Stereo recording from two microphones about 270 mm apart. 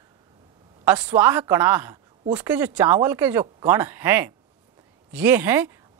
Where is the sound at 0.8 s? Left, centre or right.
Centre.